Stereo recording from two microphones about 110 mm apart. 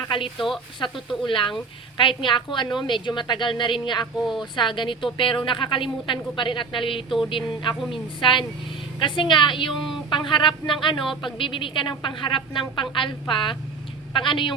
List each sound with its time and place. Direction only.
0.3 s speech: centre (ahead or behind)
0.8 s a woman's voice: 50° left (ahead or behind)